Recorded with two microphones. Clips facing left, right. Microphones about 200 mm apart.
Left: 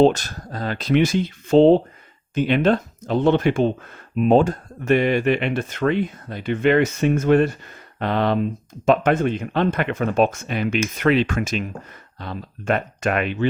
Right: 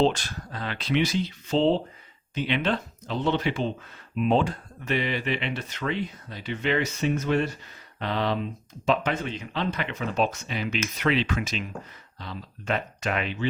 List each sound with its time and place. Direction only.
0.0 s speech: 45° left (ahead or behind)